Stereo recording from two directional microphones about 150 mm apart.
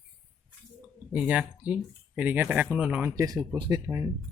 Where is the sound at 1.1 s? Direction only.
5° right (ahead or behind).